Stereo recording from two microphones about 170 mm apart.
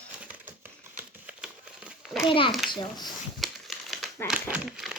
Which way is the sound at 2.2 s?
30° left (ahead or behind).